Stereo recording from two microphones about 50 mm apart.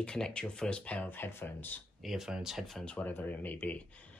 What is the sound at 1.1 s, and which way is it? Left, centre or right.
Speech, left.